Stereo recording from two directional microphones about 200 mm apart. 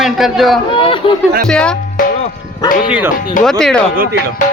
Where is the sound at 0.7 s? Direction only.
25° left (ahead or behind).